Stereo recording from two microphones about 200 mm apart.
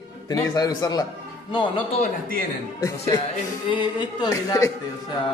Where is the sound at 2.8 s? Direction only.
15° left (ahead or behind).